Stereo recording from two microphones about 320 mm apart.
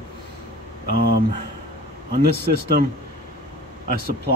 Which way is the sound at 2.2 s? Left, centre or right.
Right.